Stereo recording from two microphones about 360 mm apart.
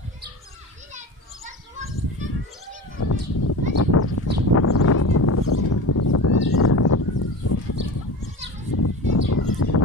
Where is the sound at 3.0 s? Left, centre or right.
Left.